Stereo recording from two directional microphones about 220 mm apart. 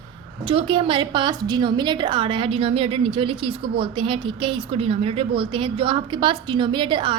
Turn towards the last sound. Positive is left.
turn(degrees=-20)  # may be behind; listen again after turning